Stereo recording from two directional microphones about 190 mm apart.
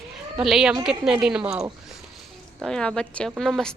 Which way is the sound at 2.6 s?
5° left (ahead or behind).